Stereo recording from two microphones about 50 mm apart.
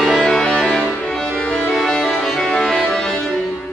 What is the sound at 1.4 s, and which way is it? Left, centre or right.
Music, left.